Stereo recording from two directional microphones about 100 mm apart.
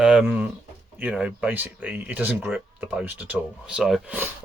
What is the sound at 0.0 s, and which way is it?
Speech, 5° right (ahead or behind).